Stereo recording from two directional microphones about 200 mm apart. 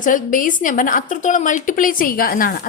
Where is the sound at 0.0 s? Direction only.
40° left (ahead or behind).